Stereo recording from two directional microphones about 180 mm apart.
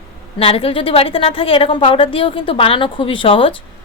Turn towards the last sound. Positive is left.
turn(degrees=30)  # may be behind; listen again after turning